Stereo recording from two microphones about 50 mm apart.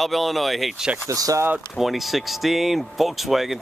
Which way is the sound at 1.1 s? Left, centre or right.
Right.